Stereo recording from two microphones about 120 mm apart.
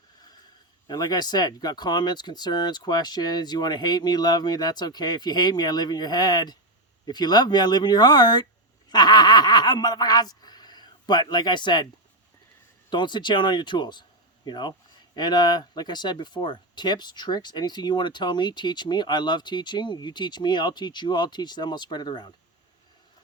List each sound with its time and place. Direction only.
0.9 s speech: 35° left (ahead or behind)
12.9 s speech: 40° left (ahead or behind)